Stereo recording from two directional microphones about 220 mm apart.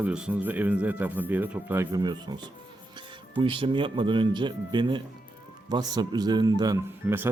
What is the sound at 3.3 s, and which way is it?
Speech, 25° right (ahead or behind).